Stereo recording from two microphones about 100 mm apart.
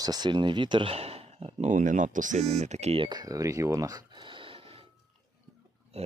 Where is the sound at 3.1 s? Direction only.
40° right (ahead or behind).